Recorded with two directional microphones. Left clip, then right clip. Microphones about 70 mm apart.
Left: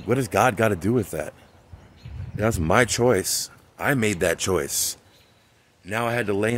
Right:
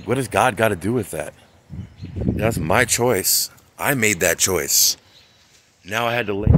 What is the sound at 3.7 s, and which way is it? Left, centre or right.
Speech, centre.